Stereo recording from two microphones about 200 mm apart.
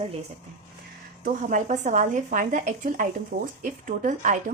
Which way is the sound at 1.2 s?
40° right (ahead or behind).